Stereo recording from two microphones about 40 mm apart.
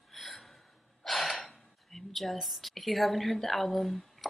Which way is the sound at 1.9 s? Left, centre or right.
Centre.